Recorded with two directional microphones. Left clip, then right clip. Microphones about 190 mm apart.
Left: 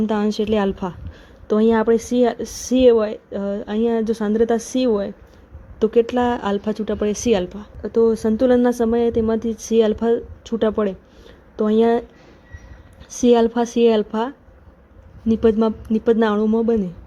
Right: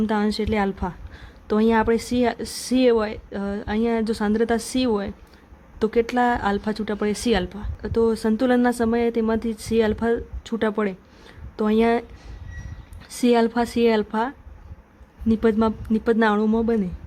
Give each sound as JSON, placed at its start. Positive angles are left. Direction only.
{"t": 0.0, "sound": "a woman's voice", "side_deg": 0}
{"t": 13.1, "sound": "a woman's voice", "side_deg": -10}